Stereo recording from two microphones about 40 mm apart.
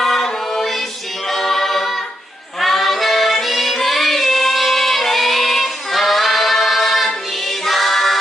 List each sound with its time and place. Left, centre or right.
0.0 s choir: centre
1.3 s a capella: centre
2.6 s music: centre